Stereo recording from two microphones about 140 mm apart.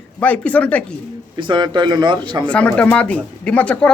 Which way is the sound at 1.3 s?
35° right (ahead or behind).